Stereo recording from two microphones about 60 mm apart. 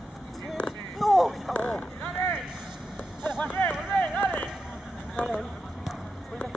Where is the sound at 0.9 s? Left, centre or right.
Centre.